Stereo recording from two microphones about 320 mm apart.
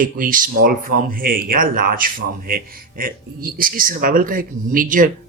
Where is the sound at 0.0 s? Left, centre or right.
Right.